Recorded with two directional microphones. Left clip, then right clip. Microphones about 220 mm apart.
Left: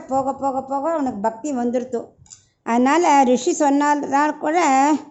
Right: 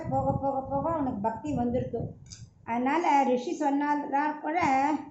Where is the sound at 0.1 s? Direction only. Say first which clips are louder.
Left 8 dB; 50° left (ahead or behind).